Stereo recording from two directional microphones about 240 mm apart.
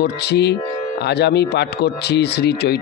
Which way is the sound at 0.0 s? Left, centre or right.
Left.